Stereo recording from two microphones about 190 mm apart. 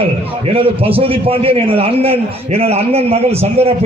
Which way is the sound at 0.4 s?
30° right (ahead or behind).